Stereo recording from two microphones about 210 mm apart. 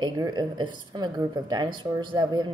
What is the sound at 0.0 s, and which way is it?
A woman's voice, 20° right (ahead or behind).